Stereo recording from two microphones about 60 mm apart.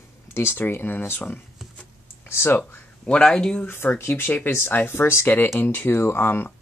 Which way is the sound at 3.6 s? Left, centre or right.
Left.